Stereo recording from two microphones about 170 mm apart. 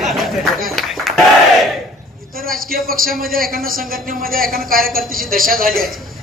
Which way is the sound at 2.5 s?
60° right (ahead or behind).